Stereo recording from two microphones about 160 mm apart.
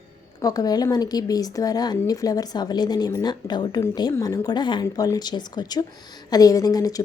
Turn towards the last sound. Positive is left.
turn(degrees=20)  # may be behind; listen again after turning